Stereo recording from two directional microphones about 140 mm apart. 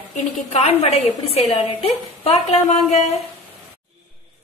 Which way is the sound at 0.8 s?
50° left (ahead or behind).